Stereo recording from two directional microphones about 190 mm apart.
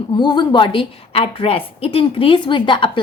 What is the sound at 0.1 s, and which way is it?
A woman's voice, 25° left (ahead or behind).